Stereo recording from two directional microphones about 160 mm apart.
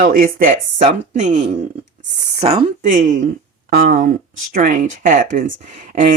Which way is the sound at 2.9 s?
55° right (ahead or behind).